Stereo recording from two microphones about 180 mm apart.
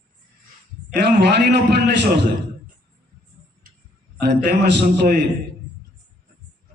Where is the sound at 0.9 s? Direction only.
65° right (ahead or behind).